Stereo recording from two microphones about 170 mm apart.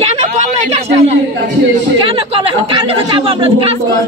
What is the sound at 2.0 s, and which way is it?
A woman's voice, 30° right (ahead or behind).